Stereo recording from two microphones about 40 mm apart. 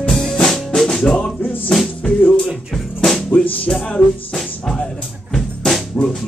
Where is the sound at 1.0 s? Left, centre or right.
Left.